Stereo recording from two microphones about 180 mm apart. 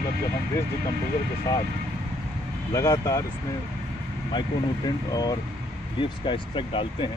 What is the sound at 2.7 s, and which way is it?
Speech, 20° left (ahead or behind).